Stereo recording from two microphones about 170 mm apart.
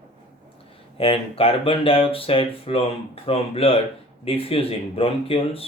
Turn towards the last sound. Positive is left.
turn(degrees=35)  # may be behind; listen again after turning